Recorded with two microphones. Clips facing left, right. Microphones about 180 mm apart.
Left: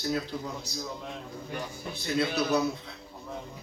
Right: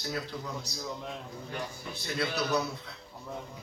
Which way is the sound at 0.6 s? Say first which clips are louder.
Left 2 dB; centre (ahead or behind).